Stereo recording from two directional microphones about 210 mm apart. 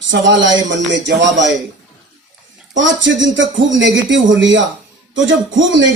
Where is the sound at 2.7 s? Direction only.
60° right (ahead or behind).